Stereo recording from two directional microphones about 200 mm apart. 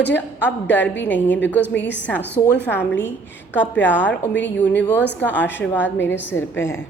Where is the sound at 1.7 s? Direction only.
60° left (ahead or behind).